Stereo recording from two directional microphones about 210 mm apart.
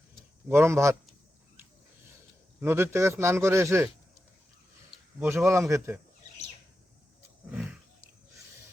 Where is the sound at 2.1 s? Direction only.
10° right (ahead or behind).